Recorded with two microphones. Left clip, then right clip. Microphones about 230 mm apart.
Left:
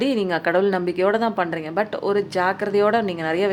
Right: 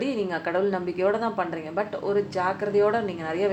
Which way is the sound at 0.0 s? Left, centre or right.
Left.